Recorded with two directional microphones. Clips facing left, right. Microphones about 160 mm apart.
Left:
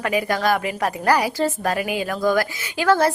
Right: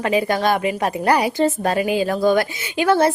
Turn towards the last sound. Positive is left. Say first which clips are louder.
# right 2 dB
turn(degrees=-20)  # may be behind; listen again after turning